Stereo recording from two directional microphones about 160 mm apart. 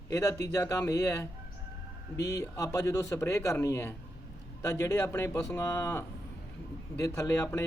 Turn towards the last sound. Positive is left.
turn(degrees=20)  # may be behind; listen again after turning